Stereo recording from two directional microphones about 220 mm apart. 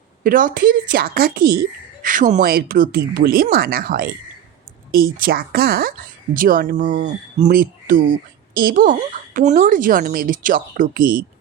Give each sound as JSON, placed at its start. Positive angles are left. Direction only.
{"t": 0.2, "sound": "a woman's voice", "side_deg": -40}